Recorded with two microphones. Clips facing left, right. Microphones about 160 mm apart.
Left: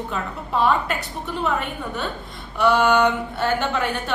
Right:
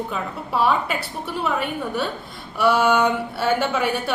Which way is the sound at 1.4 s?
5° right (ahead or behind).